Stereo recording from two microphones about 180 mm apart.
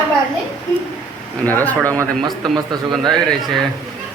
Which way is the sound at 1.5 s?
10° left (ahead or behind).